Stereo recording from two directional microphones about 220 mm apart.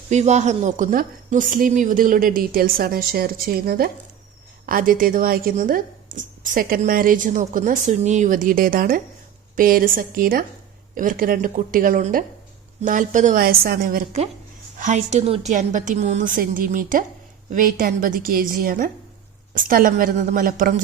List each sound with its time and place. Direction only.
0.1 s speech: 30° right (ahead or behind)